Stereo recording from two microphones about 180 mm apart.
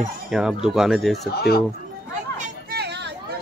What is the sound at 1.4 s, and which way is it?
Speech, 60° left (ahead or behind).